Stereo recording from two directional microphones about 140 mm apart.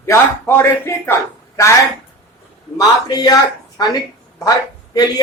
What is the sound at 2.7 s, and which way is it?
A woman's voice, 25° left (ahead or behind).